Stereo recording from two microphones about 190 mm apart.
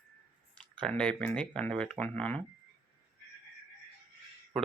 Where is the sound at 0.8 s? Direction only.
5° left (ahead or behind).